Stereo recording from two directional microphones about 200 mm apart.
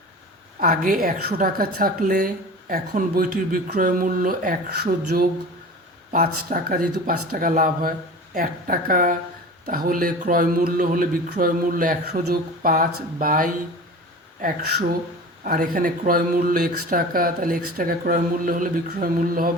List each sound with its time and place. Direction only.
0.6 s a woman's voice: 45° right (ahead or behind)
6.5 s a woman's voice: 45° right (ahead or behind)
15.4 s a woman's voice: 45° right (ahead or behind)